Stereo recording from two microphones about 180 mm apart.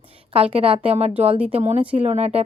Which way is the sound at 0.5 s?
35° right (ahead or behind).